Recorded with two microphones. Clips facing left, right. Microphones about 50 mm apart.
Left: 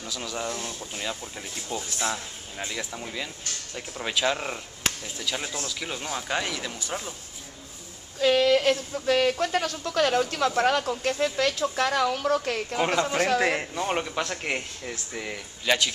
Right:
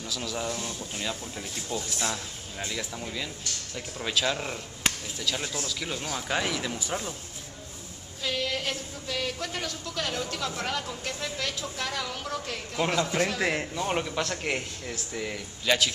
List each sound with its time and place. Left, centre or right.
0.0 s speech: centre
6.3 s speech: centre
8.2 s speech: left
12.7 s speech: centre
13.0 s a man's voice: left
13.8 s speech: centre